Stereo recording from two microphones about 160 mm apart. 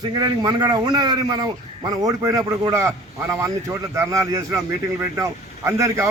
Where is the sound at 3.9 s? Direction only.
20° right (ahead or behind).